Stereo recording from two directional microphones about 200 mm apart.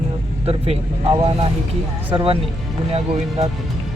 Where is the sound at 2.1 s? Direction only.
25° right (ahead or behind).